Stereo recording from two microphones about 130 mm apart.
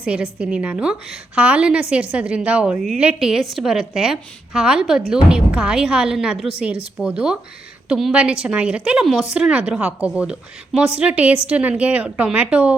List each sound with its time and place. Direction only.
0.0 s a woman's voice: 5° right (ahead or behind)